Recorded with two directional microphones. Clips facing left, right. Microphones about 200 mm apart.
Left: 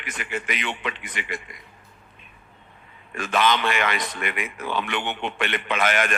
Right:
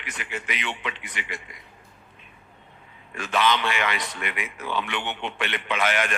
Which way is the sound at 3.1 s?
50° left (ahead or behind).